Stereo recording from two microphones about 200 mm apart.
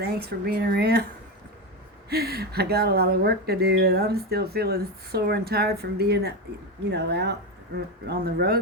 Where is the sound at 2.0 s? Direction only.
50° right (ahead or behind).